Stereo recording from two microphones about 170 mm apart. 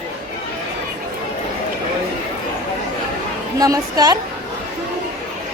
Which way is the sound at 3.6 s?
20° right (ahead or behind).